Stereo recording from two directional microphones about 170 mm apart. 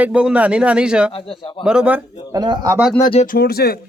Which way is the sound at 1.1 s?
35° left (ahead or behind).